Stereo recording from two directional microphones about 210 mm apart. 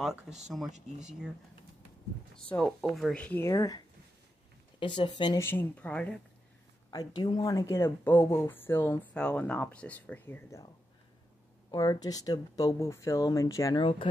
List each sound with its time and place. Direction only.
0.7 s speech: 35° right (ahead or behind)
2.3 s speech: 5° left (ahead or behind)
6.9 s speech: 20° left (ahead or behind)
11.7 s speech: 20° left (ahead or behind)